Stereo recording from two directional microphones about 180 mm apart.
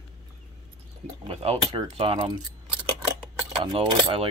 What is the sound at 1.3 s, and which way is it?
Speech, 35° right (ahead or behind).